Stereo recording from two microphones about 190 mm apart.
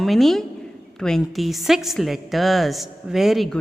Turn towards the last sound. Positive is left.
turn(degrees=0)  # may be behind; listen again after turning